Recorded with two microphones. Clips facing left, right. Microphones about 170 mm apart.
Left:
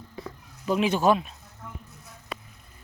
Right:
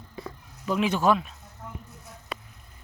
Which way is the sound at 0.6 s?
20° left (ahead or behind).